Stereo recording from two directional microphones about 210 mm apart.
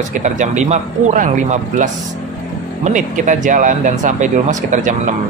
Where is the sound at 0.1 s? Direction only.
35° right (ahead or behind).